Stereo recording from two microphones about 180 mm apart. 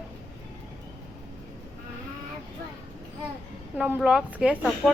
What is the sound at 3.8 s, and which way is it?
Speech, 5° right (ahead or behind).